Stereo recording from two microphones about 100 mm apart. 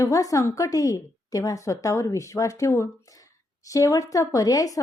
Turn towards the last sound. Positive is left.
turn(degrees=35)  # may be behind; listen again after turning